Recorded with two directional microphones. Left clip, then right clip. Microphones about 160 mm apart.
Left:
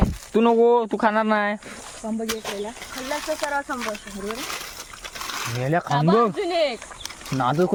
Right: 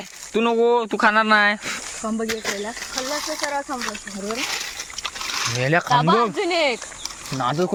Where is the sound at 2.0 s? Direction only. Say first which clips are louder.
Right 2 dB; 35° right (ahead or behind).